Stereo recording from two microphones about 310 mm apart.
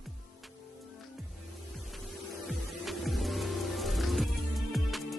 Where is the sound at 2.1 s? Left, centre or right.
Centre.